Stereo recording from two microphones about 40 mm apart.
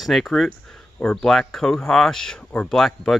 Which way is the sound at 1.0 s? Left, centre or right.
Left.